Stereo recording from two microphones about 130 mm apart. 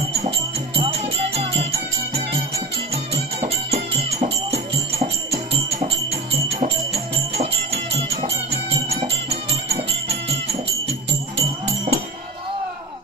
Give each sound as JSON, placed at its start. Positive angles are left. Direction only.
{"t": 0.7, "sound": "music", "side_deg": -50}